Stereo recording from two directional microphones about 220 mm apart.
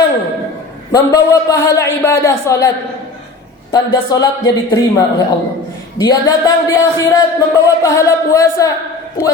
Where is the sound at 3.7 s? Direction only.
15° left (ahead or behind).